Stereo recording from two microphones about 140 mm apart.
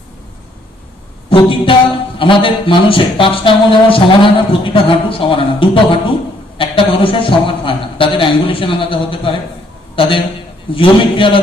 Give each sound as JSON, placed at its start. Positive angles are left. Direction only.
{"t": 1.3, "sound": "a man's voice", "side_deg": 40}